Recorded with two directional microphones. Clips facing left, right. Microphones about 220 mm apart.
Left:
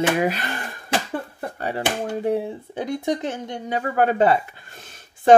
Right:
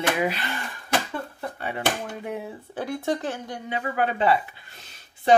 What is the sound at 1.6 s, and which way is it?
Speech, 40° left (ahead or behind).